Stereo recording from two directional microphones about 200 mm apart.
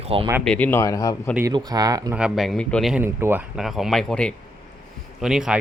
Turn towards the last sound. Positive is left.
turn(degrees=-5)  # may be behind; listen again after turning